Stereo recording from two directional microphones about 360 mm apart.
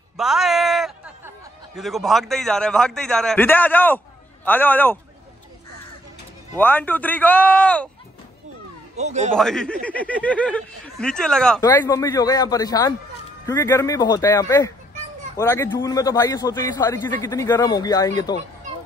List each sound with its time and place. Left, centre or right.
0.2 s a sound: centre
1.8 s speech: centre
6.5 s speech: centre
8.9 s a man's voice: centre
9.3 s a man's voice: centre